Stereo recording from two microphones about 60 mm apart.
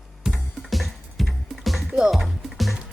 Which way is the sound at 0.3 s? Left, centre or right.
Centre.